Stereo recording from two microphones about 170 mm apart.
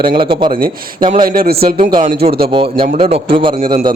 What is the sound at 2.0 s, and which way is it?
Speech, 45° right (ahead or behind).